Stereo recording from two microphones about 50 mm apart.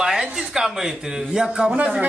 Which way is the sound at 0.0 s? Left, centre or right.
Centre.